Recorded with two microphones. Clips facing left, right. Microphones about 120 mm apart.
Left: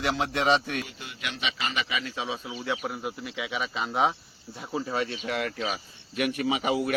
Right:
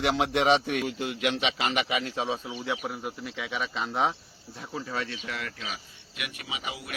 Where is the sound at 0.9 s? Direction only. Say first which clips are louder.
Right 9 dB; 90° right; by 2.4 s 40° right (ahead or behind).